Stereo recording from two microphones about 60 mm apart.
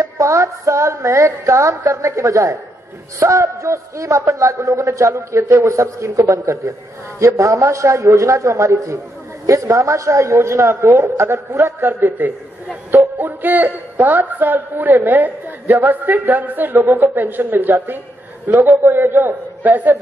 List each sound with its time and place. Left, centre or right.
0.0 s a sound: right
1.9 s a woman's voice: right
12.2 s speech: right